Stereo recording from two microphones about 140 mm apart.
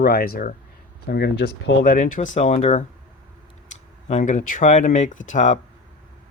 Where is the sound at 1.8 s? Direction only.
70° left (ahead or behind).